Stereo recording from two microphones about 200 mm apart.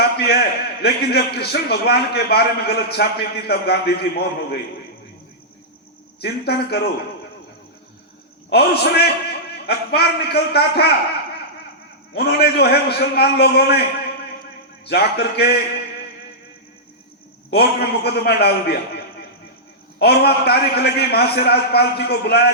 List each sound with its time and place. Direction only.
0.0 s a man's voice: 55° left (ahead or behind)
6.1 s a man's voice: 55° left (ahead or behind)
8.4 s a man's voice: 55° left (ahead or behind)
12.1 s a man's voice: 55° left (ahead or behind)
14.8 s a man's voice: 55° left (ahead or behind)
17.5 s a man's voice: 55° left (ahead or behind)